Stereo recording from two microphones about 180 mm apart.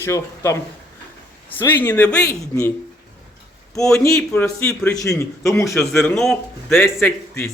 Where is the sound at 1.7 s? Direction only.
10° left (ahead or behind).